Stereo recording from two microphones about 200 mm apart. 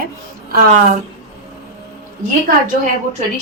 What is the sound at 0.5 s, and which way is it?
Speech, 45° right (ahead or behind).